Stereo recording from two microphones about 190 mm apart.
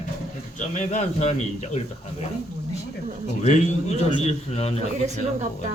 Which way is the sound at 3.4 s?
40° left (ahead or behind).